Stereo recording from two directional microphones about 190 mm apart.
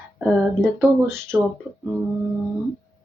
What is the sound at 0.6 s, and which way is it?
Speech, centre (ahead or behind).